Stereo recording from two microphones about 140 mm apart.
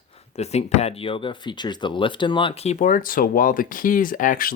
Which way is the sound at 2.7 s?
70° left (ahead or behind).